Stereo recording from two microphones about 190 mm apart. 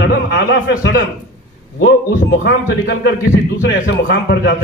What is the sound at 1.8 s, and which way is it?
A man's voice, 75° left (ahead or behind).